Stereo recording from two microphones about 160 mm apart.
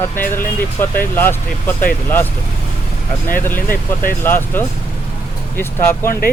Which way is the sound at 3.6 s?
60° left (ahead or behind).